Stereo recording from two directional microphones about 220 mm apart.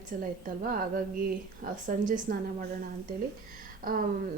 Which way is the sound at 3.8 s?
40° right (ahead or behind).